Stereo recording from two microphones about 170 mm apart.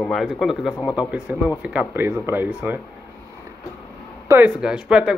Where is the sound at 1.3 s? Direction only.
10° right (ahead or behind).